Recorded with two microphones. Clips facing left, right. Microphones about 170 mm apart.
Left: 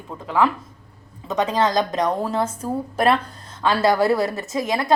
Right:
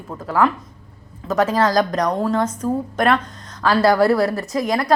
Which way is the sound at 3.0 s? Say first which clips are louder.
Even; 30° left (ahead or behind).